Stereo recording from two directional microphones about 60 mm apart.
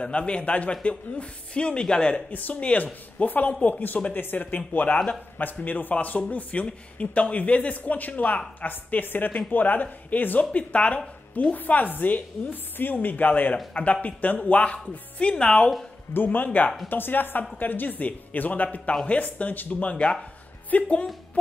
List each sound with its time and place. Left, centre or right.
0.0 s speech: centre
16.1 s a woman's voice: left